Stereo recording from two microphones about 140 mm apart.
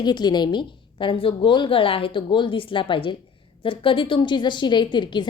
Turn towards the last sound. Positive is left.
turn(degrees=35)  # may be behind; listen again after turning